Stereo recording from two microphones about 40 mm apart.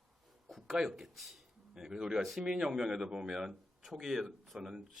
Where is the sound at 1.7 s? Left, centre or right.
Centre.